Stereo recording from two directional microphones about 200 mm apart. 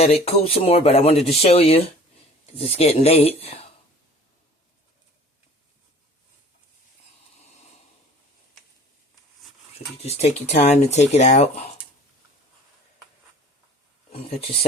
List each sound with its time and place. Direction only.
0.0 s speech: 30° left (ahead or behind)
9.7 s speech: 30° left (ahead or behind)
14.1 s speech: 30° left (ahead or behind)